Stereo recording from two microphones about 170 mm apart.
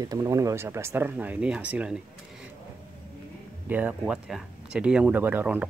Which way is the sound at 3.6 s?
10° right (ahead or behind).